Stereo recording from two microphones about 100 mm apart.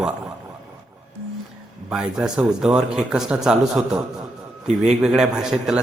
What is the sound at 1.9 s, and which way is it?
Speech, 10° right (ahead or behind).